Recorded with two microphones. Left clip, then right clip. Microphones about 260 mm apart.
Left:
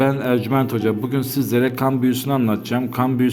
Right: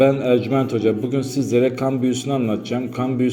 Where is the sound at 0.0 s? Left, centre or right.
Centre.